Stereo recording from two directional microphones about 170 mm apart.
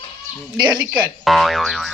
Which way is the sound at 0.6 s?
25° right (ahead or behind).